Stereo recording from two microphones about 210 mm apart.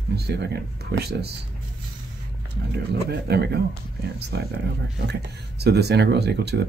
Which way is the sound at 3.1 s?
50° right (ahead or behind).